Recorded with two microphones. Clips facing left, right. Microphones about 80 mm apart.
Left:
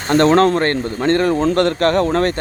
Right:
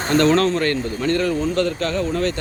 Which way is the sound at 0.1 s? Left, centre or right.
Left.